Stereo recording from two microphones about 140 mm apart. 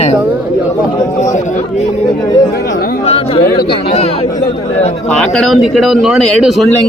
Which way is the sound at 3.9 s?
45° left (ahead or behind).